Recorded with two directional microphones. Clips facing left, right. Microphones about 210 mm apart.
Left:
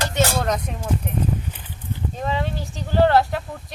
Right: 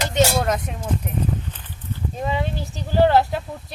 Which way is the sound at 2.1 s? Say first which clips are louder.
Right 1 dB; 5° right (ahead or behind).